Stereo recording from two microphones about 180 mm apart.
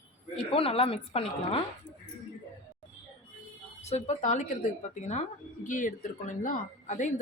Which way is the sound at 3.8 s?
40° left (ahead or behind).